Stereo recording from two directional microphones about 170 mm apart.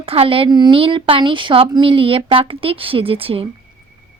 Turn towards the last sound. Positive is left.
turn(degrees=-35)  # may be behind; listen again after turning